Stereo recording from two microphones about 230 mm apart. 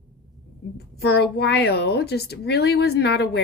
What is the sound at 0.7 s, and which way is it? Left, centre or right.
A woman's voice, left.